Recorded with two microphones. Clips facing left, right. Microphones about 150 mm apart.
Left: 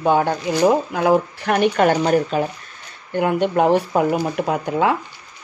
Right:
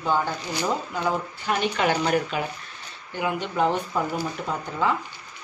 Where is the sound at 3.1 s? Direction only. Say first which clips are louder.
Left 9 dB; 55° left (ahead or behind).